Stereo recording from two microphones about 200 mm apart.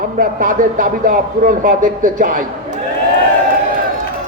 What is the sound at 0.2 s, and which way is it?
Speech, 45° right (ahead or behind).